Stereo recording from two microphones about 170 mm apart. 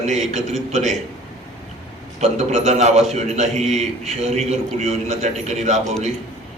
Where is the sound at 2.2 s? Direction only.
40° right (ahead or behind).